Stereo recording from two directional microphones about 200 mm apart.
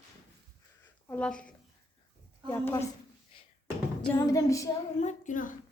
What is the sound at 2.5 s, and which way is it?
Music, 15° left (ahead or behind).